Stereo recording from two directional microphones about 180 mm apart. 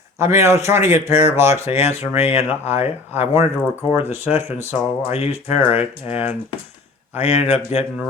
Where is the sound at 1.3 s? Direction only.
15° right (ahead or behind).